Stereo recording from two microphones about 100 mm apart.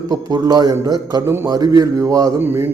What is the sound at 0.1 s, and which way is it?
A man's voice, 40° right (ahead or behind).